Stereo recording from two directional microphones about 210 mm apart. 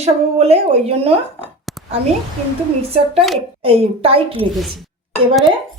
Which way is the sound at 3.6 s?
30° right (ahead or behind).